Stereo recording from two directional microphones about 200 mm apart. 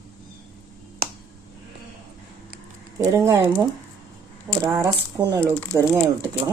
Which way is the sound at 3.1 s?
15° right (ahead or behind).